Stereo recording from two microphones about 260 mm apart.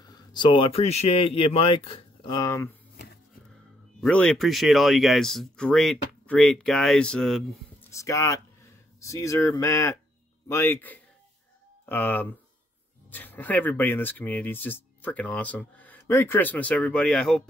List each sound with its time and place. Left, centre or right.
0.0 s speech: centre
4.0 s speech: centre
7.9 s speech: centre